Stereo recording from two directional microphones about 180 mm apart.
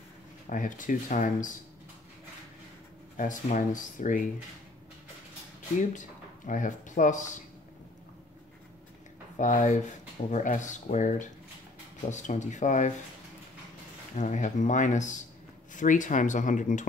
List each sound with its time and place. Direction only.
0.5 s speech: 45° left (ahead or behind)
3.2 s speech: 45° left (ahead or behind)
5.9 s speech: 45° left (ahead or behind)
9.4 s speech: 45° left (ahead or behind)
14.1 s speech: 40° left (ahead or behind)